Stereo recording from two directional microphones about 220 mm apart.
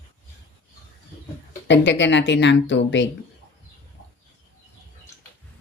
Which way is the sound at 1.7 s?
55° left (ahead or behind).